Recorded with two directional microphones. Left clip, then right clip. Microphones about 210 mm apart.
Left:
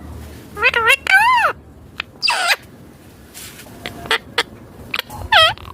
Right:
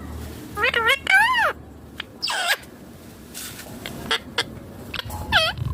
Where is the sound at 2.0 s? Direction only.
25° left (ahead or behind).